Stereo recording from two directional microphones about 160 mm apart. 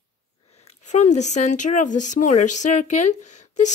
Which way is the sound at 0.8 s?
50° left (ahead or behind).